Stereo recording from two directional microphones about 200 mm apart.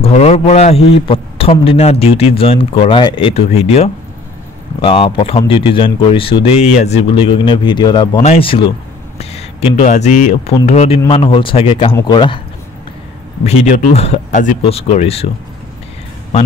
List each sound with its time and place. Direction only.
0.0 s speech: 30° left (ahead or behind)
13.5 s speech: 35° left (ahead or behind)